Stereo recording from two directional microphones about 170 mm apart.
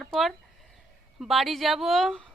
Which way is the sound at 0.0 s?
Centre (ahead or behind).